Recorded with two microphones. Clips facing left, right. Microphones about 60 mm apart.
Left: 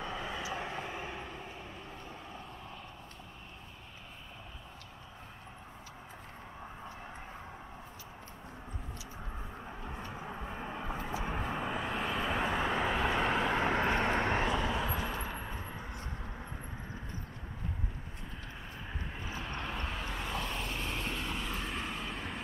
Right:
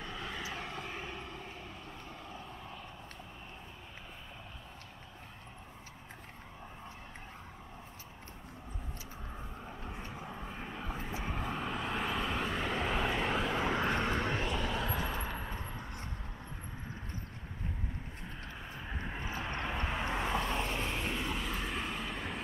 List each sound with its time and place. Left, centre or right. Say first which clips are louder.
0.0 s vehicle: left 3 dB; centre
10.2 s vehicle: left 2 dB; centre
12.3 s vehicle: left 3 dB; centre
13.5 s vehicle: left 2 dB; left
14.5 s vehicle: left 2 dB; centre
18.9 s vehicle: right 3 dB; right; by 22.4 s centre